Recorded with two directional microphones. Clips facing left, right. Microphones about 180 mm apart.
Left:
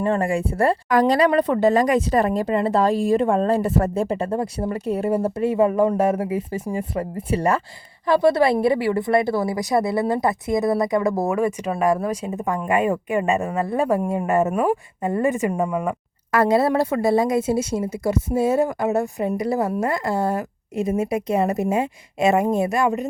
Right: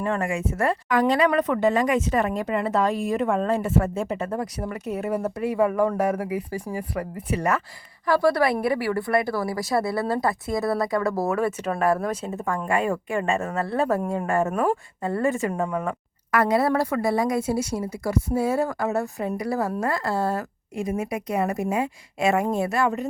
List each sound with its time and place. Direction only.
0.0 s a woman's voice: 35° left (ahead or behind); by 16.0 s 15° left (ahead or behind)
16.3 s a woman's voice: 25° left (ahead or behind)